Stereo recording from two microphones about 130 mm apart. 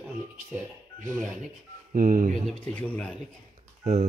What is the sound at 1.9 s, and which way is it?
Speech, 90° right.